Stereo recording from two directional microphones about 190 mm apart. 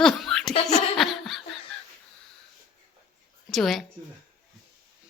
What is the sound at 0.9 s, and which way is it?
Laughter, centre (ahead or behind).